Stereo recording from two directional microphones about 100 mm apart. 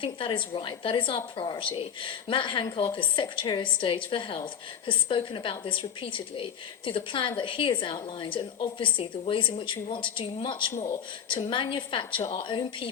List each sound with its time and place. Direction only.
0.0 s a woman's voice: 60° left (ahead or behind)